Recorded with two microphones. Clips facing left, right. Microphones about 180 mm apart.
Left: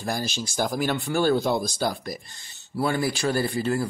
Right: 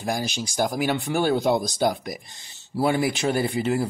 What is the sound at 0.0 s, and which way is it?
Speech, 15° right (ahead or behind).